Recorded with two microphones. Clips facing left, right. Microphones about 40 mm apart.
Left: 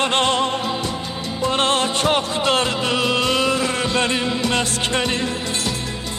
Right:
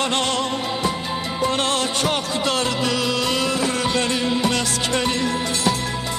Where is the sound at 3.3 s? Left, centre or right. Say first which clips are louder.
Left 2 dB; left.